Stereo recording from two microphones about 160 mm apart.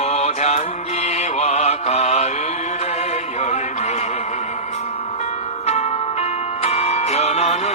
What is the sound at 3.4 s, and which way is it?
Music, 45° left (ahead or behind).